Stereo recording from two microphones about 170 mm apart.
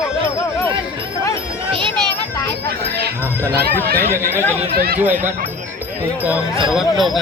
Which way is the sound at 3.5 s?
65° right (ahead or behind).